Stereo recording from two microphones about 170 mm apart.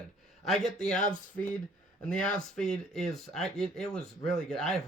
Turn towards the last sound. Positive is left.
turn(degrees=5)  # may be behind; listen again after turning